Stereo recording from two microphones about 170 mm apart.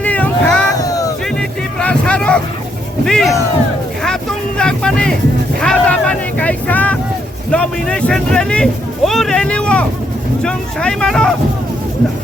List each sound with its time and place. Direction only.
0.0 s boat: 10° left (ahead or behind)
0.8 s a sound: 20° left (ahead or behind)
1.4 s a sound: 5° left (ahead or behind)
3.0 s speech: 5° left (ahead or behind)
4.0 s vehicle: 5° left (ahead or behind)
5.5 s speech: 5° left (ahead or behind)